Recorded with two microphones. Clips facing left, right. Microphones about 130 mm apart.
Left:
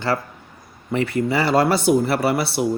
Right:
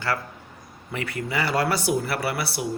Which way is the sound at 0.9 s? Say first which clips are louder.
Left 9 dB; 30° left (ahead or behind).